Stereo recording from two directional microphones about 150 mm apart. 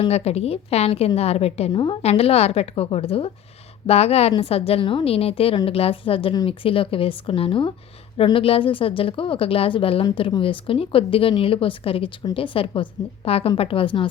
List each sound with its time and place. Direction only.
0.0 s a woman's voice: 45° left (ahead or behind)